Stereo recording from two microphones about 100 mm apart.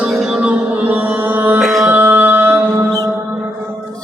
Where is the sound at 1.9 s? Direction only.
20° right (ahead or behind).